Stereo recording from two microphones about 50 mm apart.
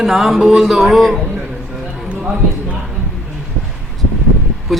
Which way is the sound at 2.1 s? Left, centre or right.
Right.